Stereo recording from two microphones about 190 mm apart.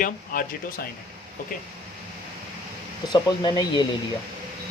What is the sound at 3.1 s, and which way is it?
Speech, 20° left (ahead or behind).